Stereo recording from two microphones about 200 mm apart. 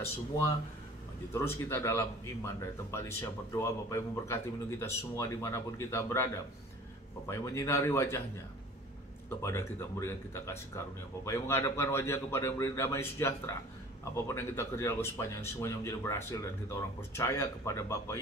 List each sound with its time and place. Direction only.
1.3 s speech: 10° left (ahead or behind)
9.4 s speech: 15° left (ahead or behind)